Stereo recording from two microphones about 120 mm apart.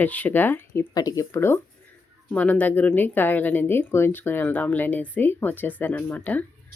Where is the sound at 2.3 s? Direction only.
10° left (ahead or behind).